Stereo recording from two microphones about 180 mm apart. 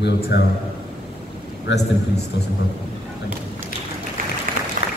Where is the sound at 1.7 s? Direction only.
80° left.